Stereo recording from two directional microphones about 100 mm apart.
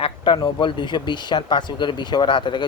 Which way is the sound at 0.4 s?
55° left (ahead or behind).